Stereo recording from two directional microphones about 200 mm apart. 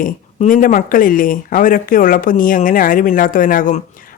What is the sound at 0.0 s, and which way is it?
Speech, 40° left (ahead or behind).